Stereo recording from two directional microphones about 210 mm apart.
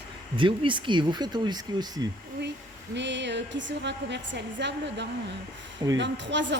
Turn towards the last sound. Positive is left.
turn(degrees=-55)  # may be behind; listen again after turning